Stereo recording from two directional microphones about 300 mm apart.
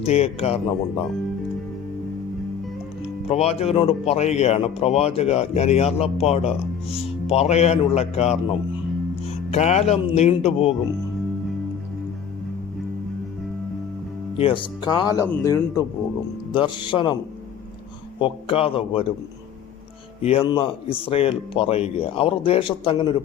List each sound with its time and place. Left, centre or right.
0.0 s speech: left
3.2 s speech: left
14.3 s speech: centre
18.2 s speech: centre
20.2 s speech: centre